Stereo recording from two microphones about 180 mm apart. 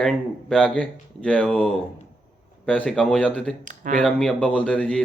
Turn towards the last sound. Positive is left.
turn(degrees=5)  # may be behind; listen again after turning